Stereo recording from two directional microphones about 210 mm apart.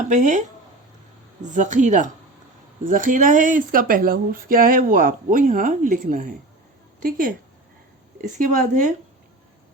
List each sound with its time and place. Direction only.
0.0 s speech: 35° right (ahead or behind)